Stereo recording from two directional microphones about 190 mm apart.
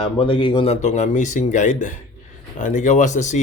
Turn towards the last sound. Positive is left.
turn(degrees=40)  # may be behind; listen again after turning